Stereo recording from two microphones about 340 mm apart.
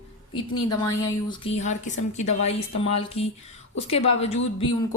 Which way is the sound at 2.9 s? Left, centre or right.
Centre.